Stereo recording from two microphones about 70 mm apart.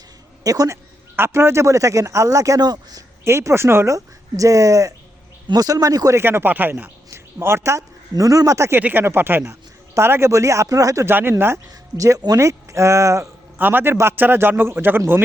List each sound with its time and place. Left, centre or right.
0.4 s speech: right
1.1 s speech: right
2.6 s speech: right
3.2 s a man's voice: right
3.8 s speech: right
5.5 s speech: right
6.1 s speech: right
7.1 s speech: right
8.1 s speech: right
8.7 s a man's voice: right
9.4 s speech: right
11.0 s a man's voice: right
11.9 s speech: right
13.6 s a man's voice: right